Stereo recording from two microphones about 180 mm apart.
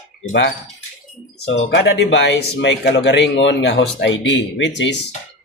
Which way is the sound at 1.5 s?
90° left.